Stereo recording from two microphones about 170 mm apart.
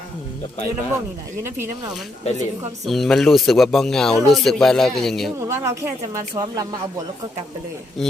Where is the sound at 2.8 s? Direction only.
Centre (ahead or behind).